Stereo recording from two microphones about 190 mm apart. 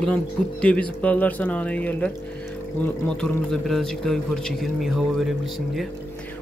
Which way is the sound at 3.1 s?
5° left (ahead or behind).